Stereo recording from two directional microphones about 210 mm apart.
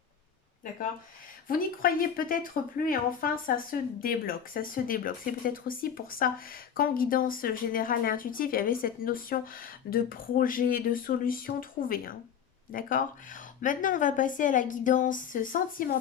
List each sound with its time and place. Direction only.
1.5 s a woman's voice: 45° left (ahead or behind)